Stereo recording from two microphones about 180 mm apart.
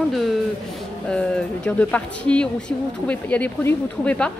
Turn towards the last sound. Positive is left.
turn(degrees=5)  # may be behind; listen again after turning